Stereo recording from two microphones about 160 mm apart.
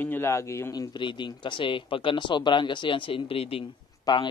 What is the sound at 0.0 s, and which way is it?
A man's voice, 15° left (ahead or behind).